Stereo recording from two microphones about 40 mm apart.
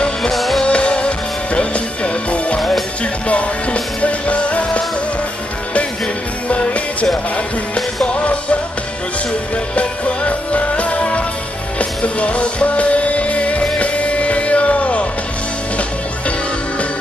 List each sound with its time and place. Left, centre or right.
0.3 s music: centre
0.7 s music: left
6.5 s music: left
8.1 s music: left
9.8 s music: left